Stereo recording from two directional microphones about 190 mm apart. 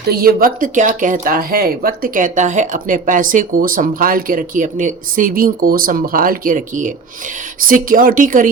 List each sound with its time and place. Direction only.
0.1 s speech: 50° right (ahead or behind)